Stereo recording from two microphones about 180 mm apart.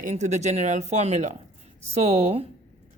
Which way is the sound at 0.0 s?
45° right (ahead or behind).